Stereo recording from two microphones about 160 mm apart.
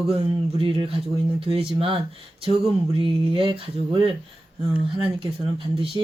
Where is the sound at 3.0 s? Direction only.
35° right (ahead or behind).